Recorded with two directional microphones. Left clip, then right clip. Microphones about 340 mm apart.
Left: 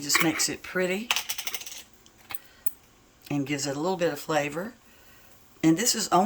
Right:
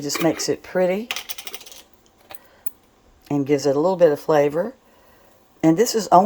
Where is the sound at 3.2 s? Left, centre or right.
Centre.